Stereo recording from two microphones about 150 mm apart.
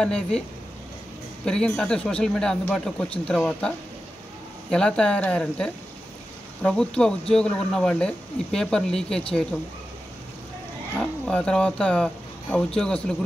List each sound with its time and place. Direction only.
0.0 s speech: 5° left (ahead or behind)
1.4 s speech: 5° left (ahead or behind)
11.0 s speech: 5° left (ahead or behind)